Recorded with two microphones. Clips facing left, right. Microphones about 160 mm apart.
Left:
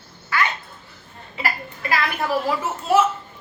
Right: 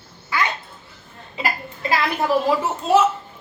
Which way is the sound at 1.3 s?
20° right (ahead or behind).